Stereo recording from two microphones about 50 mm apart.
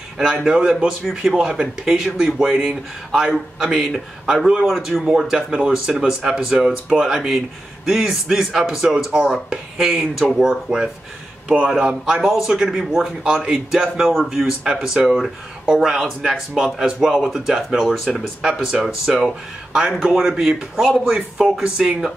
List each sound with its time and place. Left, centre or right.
0.2 s a man's voice: centre
5.0 s a man's voice: centre
12.1 s a man's voice: centre